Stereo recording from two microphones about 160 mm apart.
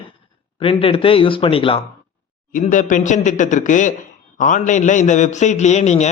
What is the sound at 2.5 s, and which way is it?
A man's voice, 55° left (ahead or behind).